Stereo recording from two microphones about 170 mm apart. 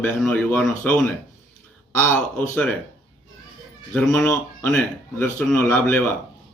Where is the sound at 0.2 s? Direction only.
5° left (ahead or behind).